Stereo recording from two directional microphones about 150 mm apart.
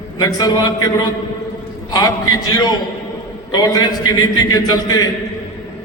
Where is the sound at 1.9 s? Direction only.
25° left (ahead or behind).